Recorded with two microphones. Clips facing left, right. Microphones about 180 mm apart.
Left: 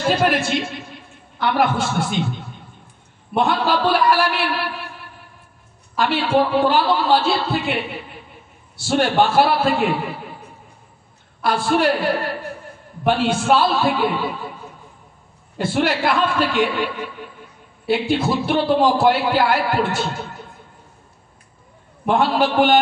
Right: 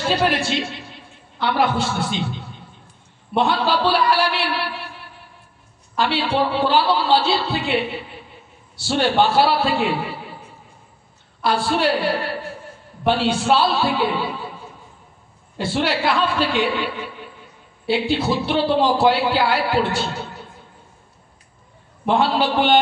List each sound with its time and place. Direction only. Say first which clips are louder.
0.1 s a man's voice: left 1 dB; 50° left (ahead or behind)
5.9 s a man's voice: left 2 dB; 50° left (ahead or behind)
11.4 s a man's voice: left 2 dB; 50° left (ahead or behind)
15.5 s a man's voice: left 2 dB; 50° left (ahead or behind)
22.0 s a man's voice: left 1 dB; 50° left (ahead or behind)